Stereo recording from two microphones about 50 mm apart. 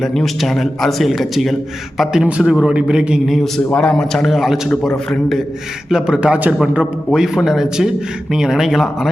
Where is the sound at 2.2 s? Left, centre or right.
Centre.